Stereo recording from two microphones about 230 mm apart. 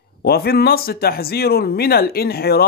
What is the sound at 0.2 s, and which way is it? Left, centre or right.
Speech, left.